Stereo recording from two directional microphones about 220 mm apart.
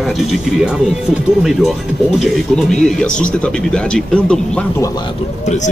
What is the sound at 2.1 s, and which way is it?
Speech, centre (ahead or behind).